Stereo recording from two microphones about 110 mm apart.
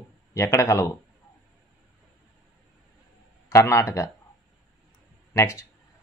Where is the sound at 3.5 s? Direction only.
25° left (ahead or behind).